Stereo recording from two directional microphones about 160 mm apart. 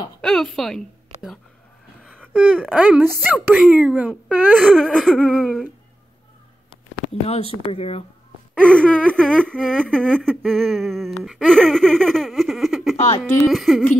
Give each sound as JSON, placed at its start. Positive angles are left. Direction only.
{"t": 0.2, "sound": "a woman's voice", "side_deg": 5}
{"t": 2.5, "sound": "a woman's voice", "side_deg": 0}
{"t": 4.1, "sound": "speech", "side_deg": 5}
{"t": 6.7, "sound": "speech", "side_deg": 40}
{"t": 8.5, "sound": "speech", "side_deg": 5}
{"t": 12.9, "sound": "a sound", "side_deg": 45}
{"t": 13.2, "sound": "speech", "side_deg": 0}